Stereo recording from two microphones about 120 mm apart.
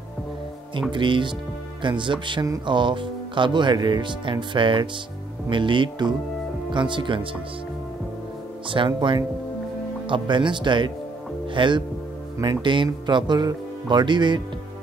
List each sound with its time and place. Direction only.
0.9 s speech: 40° right (ahead or behind)
8.6 s speech: 45° right (ahead or behind)